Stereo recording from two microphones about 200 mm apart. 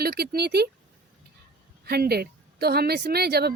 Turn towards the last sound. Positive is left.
turn(degrees=-50)  # may be behind; listen again after turning